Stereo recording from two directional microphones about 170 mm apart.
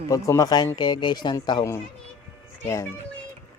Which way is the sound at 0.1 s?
20° left (ahead or behind).